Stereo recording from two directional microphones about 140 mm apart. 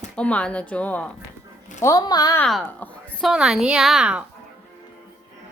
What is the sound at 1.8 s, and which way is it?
Speech, 25° left (ahead or behind).